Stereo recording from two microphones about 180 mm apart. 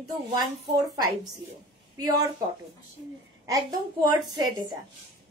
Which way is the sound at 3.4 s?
20° right (ahead or behind).